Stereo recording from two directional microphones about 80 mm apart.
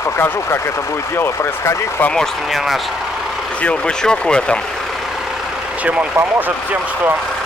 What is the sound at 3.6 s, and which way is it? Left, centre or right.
Speech, centre.